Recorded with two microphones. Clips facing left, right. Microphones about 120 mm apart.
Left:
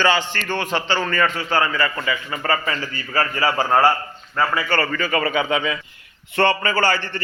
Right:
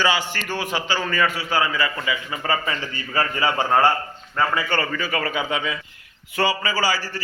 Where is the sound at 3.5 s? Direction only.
30° left (ahead or behind).